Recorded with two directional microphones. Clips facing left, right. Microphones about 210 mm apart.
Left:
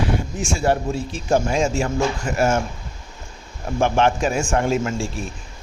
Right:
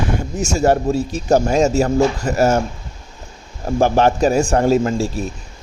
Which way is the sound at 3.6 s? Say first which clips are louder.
Right 4 dB; 35° right (ahead or behind).